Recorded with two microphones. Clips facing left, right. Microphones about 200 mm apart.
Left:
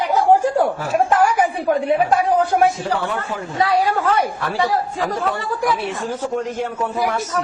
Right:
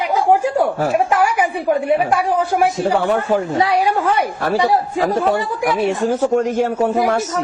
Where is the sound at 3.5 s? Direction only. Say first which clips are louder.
Right 2 dB; 20° right (ahead or behind).